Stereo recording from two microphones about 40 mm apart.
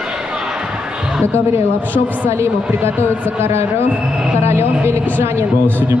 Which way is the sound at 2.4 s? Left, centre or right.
Right.